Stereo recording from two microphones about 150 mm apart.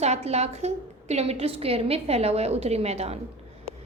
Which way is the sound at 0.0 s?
45° right (ahead or behind).